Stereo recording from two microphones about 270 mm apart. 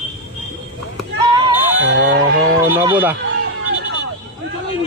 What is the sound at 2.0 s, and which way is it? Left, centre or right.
Speech, right.